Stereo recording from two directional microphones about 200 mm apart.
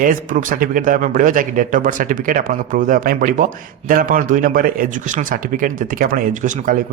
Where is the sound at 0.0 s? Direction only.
45° right (ahead or behind).